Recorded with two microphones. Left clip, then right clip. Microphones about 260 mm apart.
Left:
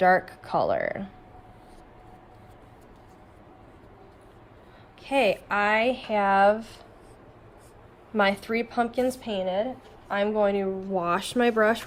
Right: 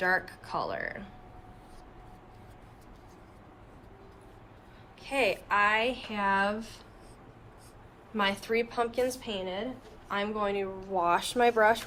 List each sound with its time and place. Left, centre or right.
0.0 s speech: left
5.0 s speech: left
8.1 s speech: left